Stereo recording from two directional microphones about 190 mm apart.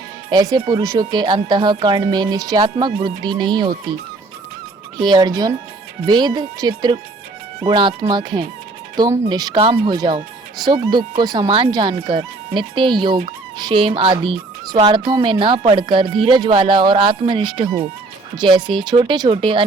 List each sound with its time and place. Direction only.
0.3 s speech: 20° right (ahead or behind)
4.9 s speech: 20° right (ahead or behind)